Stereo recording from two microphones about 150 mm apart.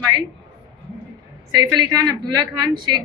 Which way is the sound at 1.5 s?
25° right (ahead or behind).